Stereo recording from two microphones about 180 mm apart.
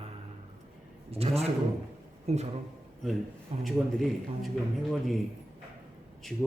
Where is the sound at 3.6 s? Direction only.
Centre (ahead or behind).